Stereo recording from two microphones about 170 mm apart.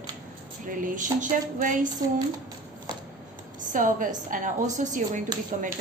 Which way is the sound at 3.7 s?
50° right (ahead or behind).